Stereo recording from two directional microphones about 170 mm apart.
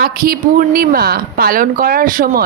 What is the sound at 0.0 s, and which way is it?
Speech, 60° right (ahead or behind).